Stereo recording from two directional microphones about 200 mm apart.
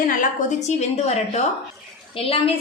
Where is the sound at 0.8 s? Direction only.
35° left (ahead or behind).